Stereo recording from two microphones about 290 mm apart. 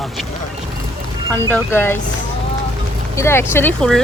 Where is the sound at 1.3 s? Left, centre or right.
Centre.